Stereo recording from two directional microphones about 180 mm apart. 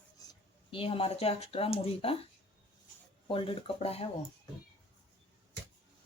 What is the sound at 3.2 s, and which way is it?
Speech, 30° left (ahead or behind).